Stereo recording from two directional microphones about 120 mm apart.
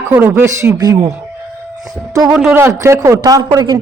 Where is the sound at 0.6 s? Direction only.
30° right (ahead or behind).